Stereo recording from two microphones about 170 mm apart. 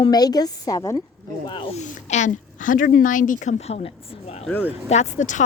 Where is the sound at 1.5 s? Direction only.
30° left (ahead or behind).